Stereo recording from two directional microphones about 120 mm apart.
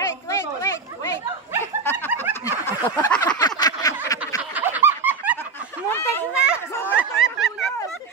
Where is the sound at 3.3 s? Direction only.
35° left (ahead or behind).